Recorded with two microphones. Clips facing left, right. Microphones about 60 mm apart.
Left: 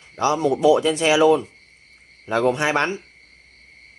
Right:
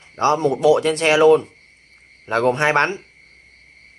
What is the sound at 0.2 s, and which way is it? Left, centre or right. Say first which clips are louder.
Speech: right 2 dB; right.